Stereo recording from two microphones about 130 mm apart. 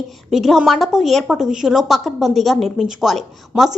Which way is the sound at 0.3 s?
Centre (ahead or behind).